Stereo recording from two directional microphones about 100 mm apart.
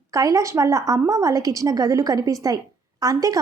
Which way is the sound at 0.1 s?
35° right (ahead or behind).